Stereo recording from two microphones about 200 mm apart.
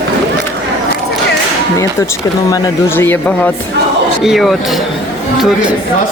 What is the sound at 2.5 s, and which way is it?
Speech, 10° left (ahead or behind).